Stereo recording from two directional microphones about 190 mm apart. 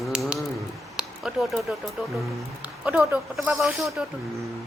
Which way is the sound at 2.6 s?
5° right (ahead or behind).